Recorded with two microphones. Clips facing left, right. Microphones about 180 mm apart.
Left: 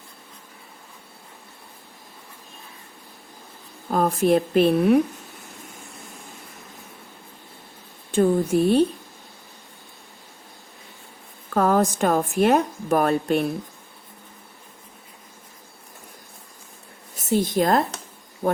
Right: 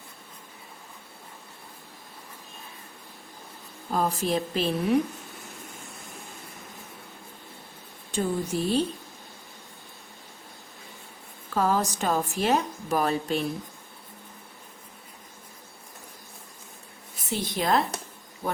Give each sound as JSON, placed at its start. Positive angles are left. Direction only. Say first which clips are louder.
{"t": 3.9, "sound": "a woman's voice", "louder": "left 7 dB", "side_deg": 55}
{"t": 8.1, "sound": "a woman's voice", "louder": "left 9 dB", "side_deg": 55}
{"t": 11.5, "sound": "a woman's voice", "louder": "left 6 dB", "side_deg": 55}
{"t": 17.2, "sound": "a woman's voice", "louder": "left 9 dB", "side_deg": 45}